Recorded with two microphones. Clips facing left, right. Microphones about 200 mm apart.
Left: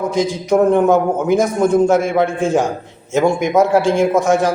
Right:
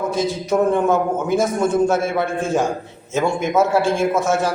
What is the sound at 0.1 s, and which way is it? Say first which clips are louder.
A man's voice: left 4 dB; 15° left (ahead or behind).